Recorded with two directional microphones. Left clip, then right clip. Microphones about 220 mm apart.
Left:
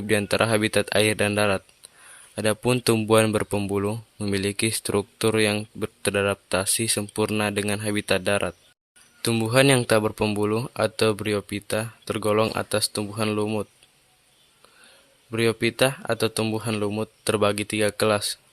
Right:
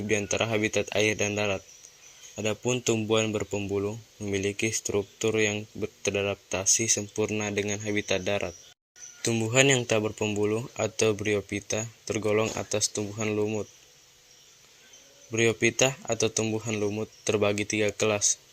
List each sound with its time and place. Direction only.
0.1 s speech: 30° left (ahead or behind)
15.3 s speech: 25° left (ahead or behind)